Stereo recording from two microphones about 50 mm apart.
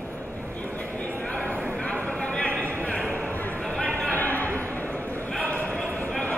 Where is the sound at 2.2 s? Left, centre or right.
Left.